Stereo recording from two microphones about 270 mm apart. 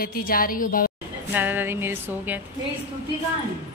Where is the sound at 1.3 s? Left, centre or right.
Centre.